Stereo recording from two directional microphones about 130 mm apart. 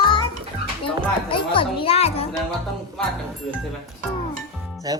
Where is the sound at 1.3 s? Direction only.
45° left (ahead or behind).